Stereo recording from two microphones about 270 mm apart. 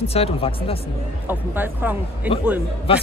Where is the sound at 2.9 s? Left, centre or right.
Left.